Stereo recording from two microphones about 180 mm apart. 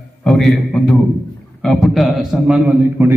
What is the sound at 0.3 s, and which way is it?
A man's voice, centre (ahead or behind).